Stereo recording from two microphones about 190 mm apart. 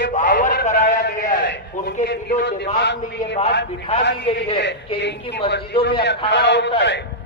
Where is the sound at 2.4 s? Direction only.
60° left (ahead or behind).